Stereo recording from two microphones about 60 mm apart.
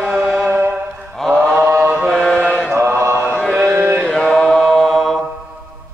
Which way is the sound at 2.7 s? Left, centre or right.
Right.